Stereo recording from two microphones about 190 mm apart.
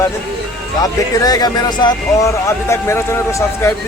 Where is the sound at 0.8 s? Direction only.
20° left (ahead or behind).